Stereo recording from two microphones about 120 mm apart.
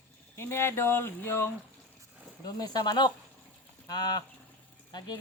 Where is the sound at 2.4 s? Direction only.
35° left (ahead or behind).